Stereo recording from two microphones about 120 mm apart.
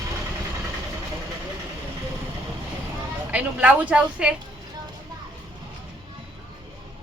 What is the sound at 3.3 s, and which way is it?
Speech, 10° right (ahead or behind).